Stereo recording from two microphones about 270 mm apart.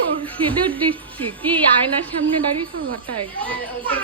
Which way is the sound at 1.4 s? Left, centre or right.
Centre.